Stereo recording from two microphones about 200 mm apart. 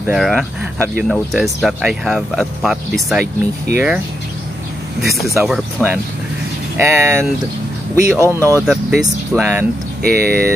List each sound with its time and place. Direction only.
0.1 s speech: centre (ahead or behind)
5.0 s speech: centre (ahead or behind)
6.8 s speech: 10° right (ahead or behind)
8.2 s speech: 15° right (ahead or behind)
8.6 s speech: centre (ahead or behind)
10.0 s speech: 50° right (ahead or behind)